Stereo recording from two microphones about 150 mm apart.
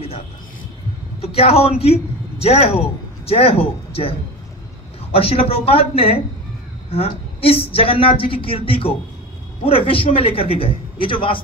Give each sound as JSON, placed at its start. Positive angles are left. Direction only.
{"t": 1.2, "sound": "a man's voice", "side_deg": 40}
{"t": 5.1, "sound": "a woman's voice", "side_deg": 40}